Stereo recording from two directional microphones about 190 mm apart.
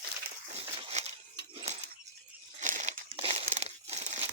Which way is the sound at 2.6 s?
40° right (ahead or behind).